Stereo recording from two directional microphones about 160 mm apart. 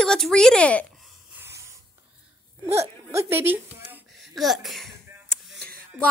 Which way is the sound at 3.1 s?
15° right (ahead or behind).